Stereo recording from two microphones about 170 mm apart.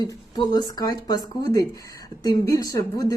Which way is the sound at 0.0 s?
25° left (ahead or behind).